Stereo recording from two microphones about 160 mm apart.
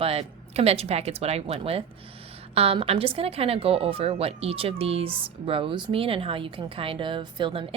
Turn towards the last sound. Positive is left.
turn(degrees=-35)  # may be behind; listen again after turning